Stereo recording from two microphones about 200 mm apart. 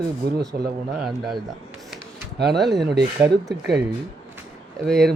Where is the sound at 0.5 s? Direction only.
50° right (ahead or behind).